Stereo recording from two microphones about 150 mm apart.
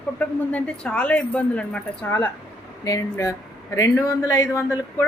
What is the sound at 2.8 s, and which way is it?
Speech, 20° left (ahead or behind).